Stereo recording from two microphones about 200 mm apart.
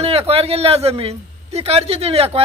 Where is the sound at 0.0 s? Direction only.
30° right (ahead or behind).